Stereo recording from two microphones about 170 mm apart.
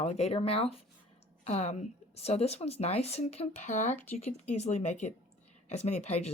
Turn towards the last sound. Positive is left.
turn(degrees=40)  # may be behind; listen again after turning